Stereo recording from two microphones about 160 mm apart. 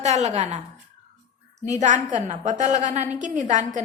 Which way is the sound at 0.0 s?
45° right (ahead or behind).